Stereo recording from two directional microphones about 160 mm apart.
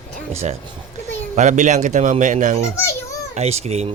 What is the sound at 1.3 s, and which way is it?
Speech, 50° right (ahead or behind).